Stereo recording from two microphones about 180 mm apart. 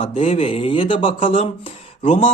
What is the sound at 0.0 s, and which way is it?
A man's voice, 30° left (ahead or behind).